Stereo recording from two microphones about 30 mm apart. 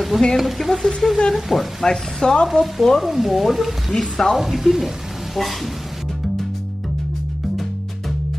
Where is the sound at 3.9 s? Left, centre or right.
Left.